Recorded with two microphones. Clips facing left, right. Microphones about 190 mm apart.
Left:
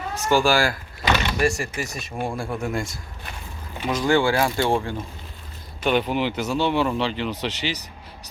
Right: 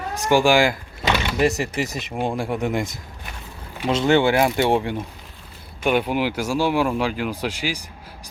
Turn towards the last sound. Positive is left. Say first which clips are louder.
# right 1 dB
turn(degrees=-10)  # may be behind; listen again after turning